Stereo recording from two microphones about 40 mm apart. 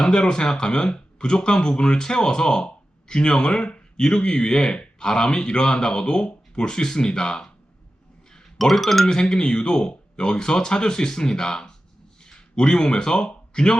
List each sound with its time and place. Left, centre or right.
0.0 s speech: left
8.5 s speech: centre
9.0 s speech: centre